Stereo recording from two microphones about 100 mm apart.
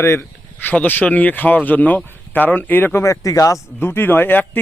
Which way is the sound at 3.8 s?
20° left (ahead or behind).